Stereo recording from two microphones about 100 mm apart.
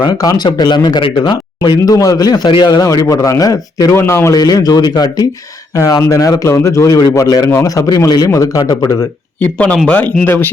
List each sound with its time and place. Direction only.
0.0 s a man's voice: 40° left (ahead or behind)
9.4 s a man's voice: 15° left (ahead or behind)